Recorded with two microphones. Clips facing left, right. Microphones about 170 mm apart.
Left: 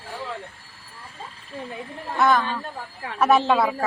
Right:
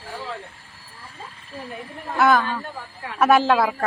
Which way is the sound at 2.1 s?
Centre (ahead or behind).